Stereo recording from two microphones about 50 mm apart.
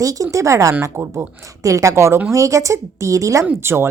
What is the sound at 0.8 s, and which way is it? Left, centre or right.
Speech, right.